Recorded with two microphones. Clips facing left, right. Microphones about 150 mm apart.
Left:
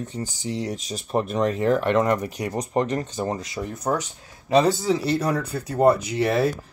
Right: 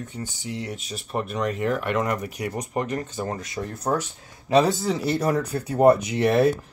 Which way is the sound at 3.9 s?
Centre (ahead or behind).